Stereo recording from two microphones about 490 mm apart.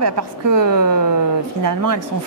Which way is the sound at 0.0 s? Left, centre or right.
Right.